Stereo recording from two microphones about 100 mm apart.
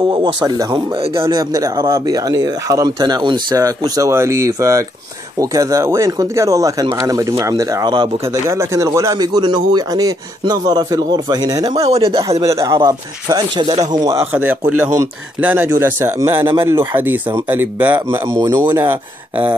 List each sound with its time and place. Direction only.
0.6 s speech: 40° right (ahead or behind)
3.5 s speech: 40° right (ahead or behind)
11.8 s speech: 80° right
12.2 s speech: 35° right (ahead or behind)
14.3 s speech: 20° right (ahead or behind)
18.3 s speech: 40° right (ahead or behind)
18.8 s speech: 20° right (ahead or behind)